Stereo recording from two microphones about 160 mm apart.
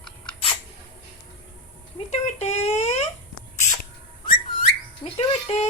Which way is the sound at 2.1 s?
45° left (ahead or behind).